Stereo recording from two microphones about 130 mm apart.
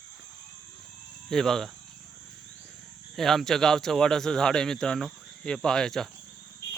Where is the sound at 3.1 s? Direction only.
Centre (ahead or behind).